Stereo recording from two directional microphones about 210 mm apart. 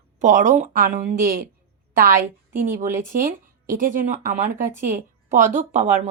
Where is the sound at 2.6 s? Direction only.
35° right (ahead or behind).